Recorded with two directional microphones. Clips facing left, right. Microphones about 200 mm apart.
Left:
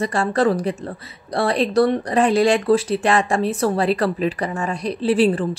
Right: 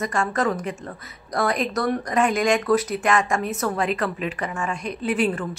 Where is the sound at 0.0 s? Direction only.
30° left (ahead or behind).